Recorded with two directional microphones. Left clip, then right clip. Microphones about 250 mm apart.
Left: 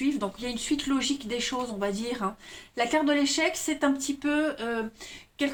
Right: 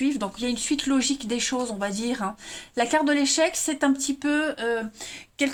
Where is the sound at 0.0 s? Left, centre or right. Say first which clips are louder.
Right 3 dB; right.